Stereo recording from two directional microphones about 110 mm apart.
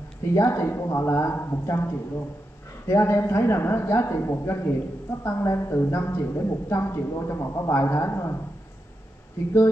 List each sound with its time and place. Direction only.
0.3 s a man's voice: 25° left (ahead or behind)